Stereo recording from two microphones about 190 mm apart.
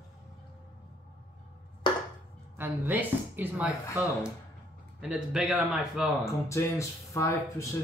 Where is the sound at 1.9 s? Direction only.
25° left (ahead or behind).